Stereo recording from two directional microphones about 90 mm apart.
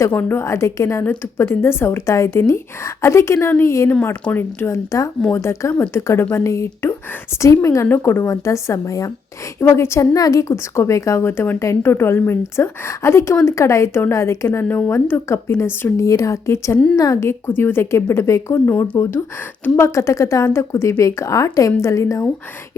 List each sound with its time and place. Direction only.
0.1 s a woman's voice: 20° left (ahead or behind)
4.1 s a woman's voice: 15° left (ahead or behind)
10.2 s a woman's voice: 45° left (ahead or behind)
10.5 s a woman's voice: 30° left (ahead or behind)